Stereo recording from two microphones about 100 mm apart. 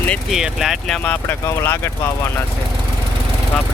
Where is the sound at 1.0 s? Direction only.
20° left (ahead or behind).